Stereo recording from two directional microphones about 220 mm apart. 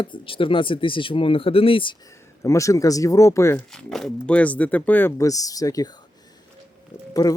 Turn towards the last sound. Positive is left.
turn(degrees=15)  # may be behind; listen again after turning